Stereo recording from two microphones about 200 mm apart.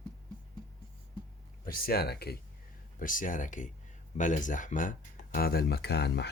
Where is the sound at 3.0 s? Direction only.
40° left (ahead or behind).